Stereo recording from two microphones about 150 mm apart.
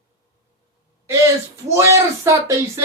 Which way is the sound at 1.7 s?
20° right (ahead or behind).